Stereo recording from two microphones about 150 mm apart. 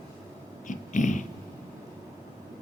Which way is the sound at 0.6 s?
55° left (ahead or behind).